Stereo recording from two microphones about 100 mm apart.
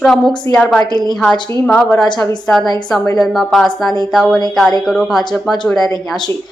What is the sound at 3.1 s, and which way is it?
Speech, 5° left (ahead or behind).